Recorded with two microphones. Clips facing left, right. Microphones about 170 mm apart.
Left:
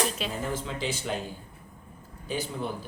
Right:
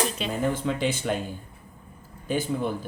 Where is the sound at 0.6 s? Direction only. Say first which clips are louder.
Right 6 dB; 55° right (ahead or behind).